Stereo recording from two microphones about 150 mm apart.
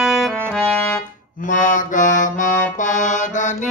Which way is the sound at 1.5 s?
60° left (ahead or behind).